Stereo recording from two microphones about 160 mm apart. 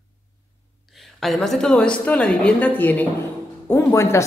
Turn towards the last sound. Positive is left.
turn(degrees=20)  # may be behind; listen again after turning